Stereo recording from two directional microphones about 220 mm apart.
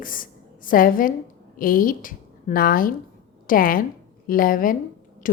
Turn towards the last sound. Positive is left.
turn(degrees=40)  # may be behind; listen again after turning